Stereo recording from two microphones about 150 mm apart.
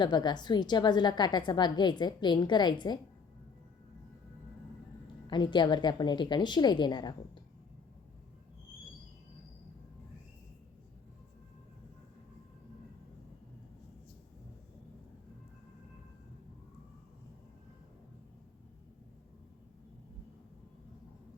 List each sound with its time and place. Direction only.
0.0 s a woman's voice: 30° left (ahead or behind)
5.3 s a woman's voice: 30° left (ahead or behind)